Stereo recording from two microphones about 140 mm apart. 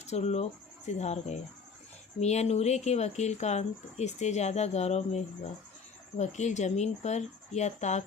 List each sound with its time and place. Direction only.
0.0 s speech: 55° left (ahead or behind)